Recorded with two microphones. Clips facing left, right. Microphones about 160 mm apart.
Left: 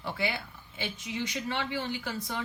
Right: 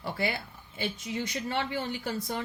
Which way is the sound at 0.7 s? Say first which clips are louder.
Right 2 dB; 40° right (ahead or behind).